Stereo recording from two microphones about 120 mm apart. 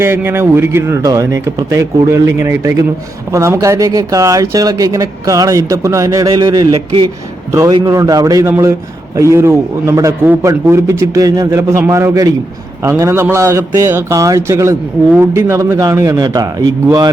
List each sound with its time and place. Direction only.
0.0 s a man's voice: 20° right (ahead or behind)